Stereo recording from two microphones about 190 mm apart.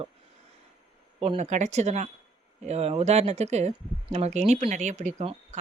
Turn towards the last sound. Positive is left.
turn(degrees=-35)  # may be behind; listen again after turning